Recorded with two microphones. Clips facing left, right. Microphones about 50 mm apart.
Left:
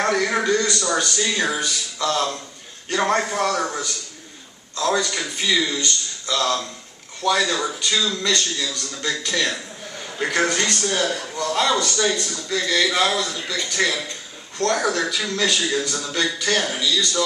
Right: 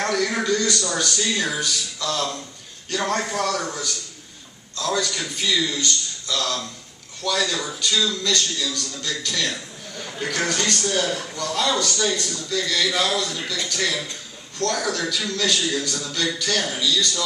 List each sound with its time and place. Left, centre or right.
0.0 s a man's voice: left
11.3 s a man's voice: left